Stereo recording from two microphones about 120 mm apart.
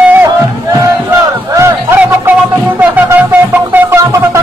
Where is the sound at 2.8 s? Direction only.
15° right (ahead or behind).